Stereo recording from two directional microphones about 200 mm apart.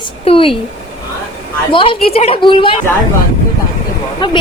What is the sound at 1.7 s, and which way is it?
A woman's voice, 25° left (ahead or behind).